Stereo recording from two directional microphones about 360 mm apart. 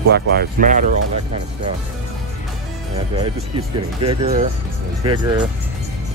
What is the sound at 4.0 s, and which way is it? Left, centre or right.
Speech, centre.